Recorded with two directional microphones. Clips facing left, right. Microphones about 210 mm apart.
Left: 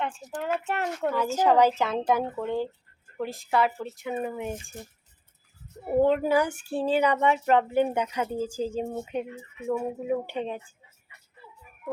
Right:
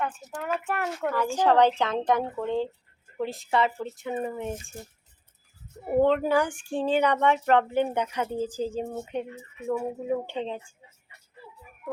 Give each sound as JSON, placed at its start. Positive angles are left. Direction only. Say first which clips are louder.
{"t": 0.0, "sound": "speech", "louder": "left 1 dB", "side_deg": 30}
{"t": 1.4, "sound": "a woman's voice", "louder": "even", "side_deg": 5}
{"t": 6.0, "sound": "speech", "louder": "even", "side_deg": 10}